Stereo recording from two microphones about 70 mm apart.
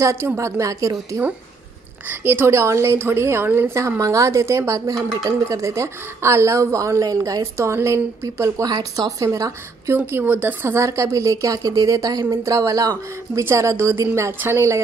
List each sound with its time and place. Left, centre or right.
0.0 s speech: right
2.0 s a woman's voice: right
4.0 s speech: right
7.6 s speech: right
8.6 s speech: right
9.2 s speech: right
9.9 s a woman's voice: right